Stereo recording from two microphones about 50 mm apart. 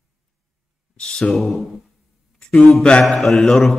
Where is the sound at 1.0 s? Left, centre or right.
Centre.